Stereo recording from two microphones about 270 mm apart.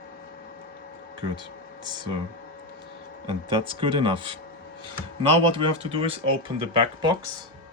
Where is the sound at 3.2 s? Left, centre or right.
Centre.